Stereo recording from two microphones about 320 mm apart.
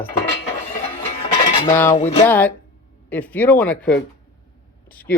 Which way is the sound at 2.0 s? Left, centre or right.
Centre.